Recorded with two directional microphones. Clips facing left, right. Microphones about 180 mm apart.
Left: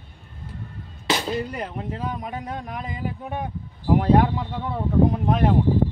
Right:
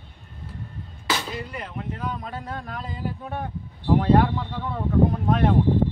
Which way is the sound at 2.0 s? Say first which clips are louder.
Left 2 dB; 15° left (ahead or behind).